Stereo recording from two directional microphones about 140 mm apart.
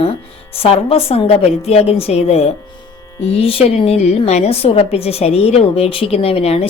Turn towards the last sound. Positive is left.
turn(degrees=45)  # may be behind; listen again after turning